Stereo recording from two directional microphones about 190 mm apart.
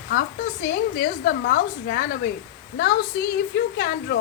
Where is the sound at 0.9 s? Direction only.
50° left (ahead or behind).